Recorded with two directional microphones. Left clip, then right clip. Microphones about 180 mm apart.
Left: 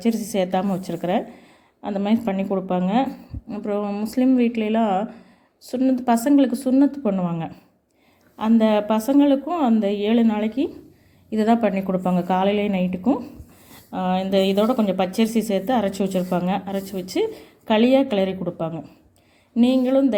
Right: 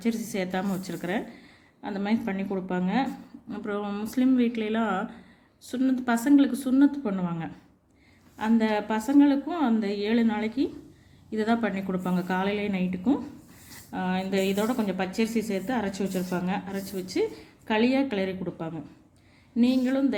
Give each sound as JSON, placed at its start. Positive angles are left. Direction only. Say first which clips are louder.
{"t": 0.0, "sound": "a woman's voice", "louder": "left 8 dB", "side_deg": 30}